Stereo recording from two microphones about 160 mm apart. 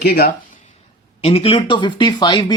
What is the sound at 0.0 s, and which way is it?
Speech, 70° left (ahead or behind).